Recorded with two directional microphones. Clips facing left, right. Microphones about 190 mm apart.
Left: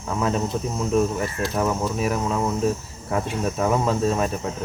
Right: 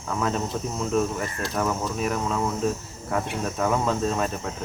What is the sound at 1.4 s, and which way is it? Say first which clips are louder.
Speech: left 2 dB; 5° left (ahead or behind).